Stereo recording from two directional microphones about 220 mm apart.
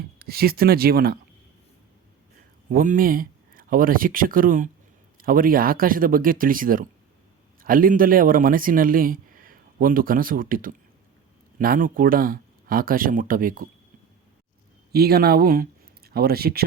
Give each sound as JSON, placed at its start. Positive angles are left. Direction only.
{"t": 0.2, "sound": "speech", "side_deg": -45}
{"t": 2.6, "sound": "speech", "side_deg": -35}
{"t": 14.9, "sound": "speech", "side_deg": -45}